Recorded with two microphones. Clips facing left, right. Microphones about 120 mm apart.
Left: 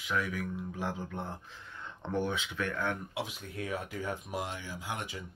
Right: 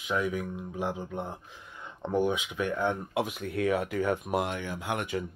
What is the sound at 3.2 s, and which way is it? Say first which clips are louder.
Speech: right 8 dB; 60° right (ahead or behind).